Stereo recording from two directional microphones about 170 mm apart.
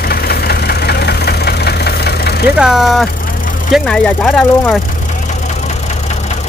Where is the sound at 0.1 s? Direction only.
70° left (ahead or behind).